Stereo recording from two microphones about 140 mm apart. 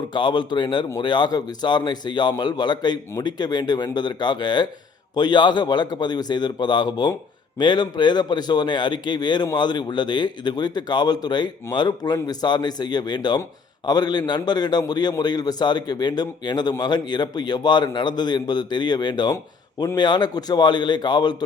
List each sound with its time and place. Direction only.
0.1 s a man's voice: 35° left (ahead or behind)